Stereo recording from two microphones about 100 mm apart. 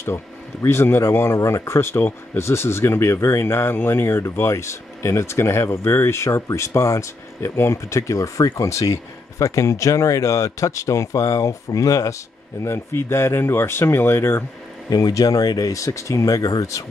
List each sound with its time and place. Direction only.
0.0 s speech: 25° left (ahead or behind)
14.9 s speech: 40° left (ahead or behind)